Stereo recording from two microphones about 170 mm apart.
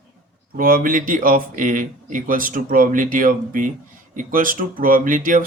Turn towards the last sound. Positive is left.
turn(degrees=-50)  # may be behind; listen again after turning